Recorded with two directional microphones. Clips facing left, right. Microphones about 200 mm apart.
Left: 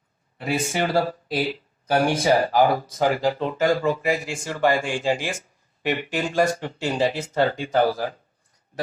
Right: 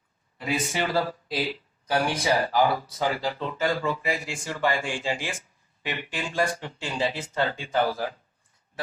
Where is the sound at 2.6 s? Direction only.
45° left (ahead or behind).